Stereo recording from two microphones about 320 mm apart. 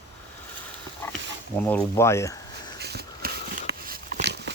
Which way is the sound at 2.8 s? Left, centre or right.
Right.